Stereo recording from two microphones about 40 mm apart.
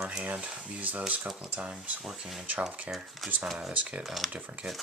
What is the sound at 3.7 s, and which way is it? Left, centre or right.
Speech, right.